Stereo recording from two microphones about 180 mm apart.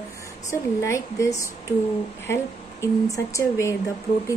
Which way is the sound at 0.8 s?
15° left (ahead or behind).